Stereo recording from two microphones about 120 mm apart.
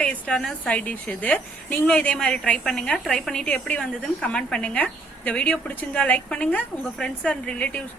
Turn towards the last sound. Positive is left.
turn(degrees=10)  # may be behind; listen again after turning